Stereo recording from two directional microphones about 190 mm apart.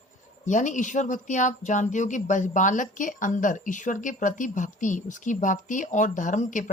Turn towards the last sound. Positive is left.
turn(degrees=40)  # may be behind; listen again after turning